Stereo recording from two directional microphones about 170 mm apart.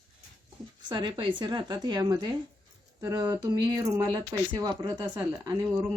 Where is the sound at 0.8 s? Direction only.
25° right (ahead or behind).